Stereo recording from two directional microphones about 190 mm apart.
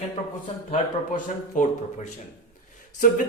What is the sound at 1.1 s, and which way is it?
Speech, 45° left (ahead or behind).